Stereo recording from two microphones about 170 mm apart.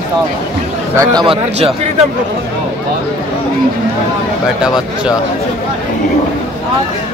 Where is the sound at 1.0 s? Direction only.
25° right (ahead or behind).